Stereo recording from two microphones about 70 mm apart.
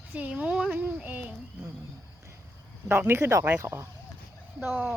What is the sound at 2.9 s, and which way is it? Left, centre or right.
Speech, right.